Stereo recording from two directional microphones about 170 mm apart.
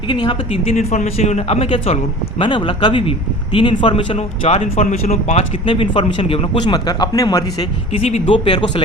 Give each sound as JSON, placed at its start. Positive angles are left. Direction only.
{"t": 0.1, "sound": "speech", "side_deg": 30}
{"t": 7.9, "sound": "speech", "side_deg": 35}